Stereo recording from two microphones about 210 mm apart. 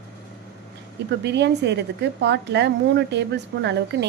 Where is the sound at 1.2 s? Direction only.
55° right (ahead or behind).